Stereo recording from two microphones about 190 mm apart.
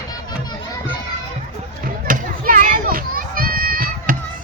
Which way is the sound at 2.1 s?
45° right (ahead or behind).